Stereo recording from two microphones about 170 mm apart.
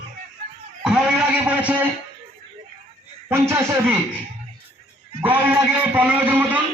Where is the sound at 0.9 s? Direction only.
5° right (ahead or behind).